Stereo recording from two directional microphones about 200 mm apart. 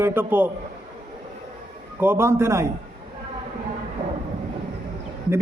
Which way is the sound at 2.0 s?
10° right (ahead or behind).